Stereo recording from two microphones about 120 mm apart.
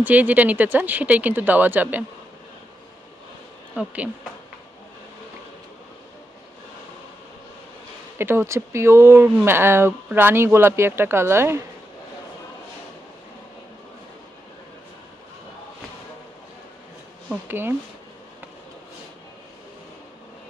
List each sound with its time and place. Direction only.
0.0 s speech: 15° right (ahead or behind)
3.7 s speech: 10° right (ahead or behind)
8.2 s speech: 20° right (ahead or behind)
17.5 s speech: 20° right (ahead or behind)